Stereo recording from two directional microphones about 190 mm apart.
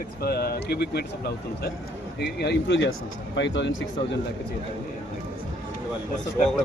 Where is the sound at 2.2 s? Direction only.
65° left (ahead or behind).